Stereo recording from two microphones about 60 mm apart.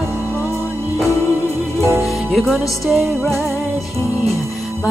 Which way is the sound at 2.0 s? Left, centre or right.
Centre.